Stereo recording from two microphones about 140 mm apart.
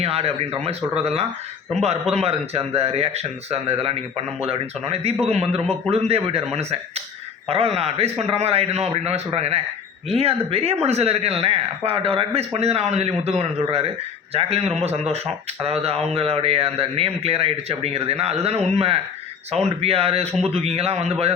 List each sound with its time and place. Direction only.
0.0 s a man's voice: 45° right (ahead or behind)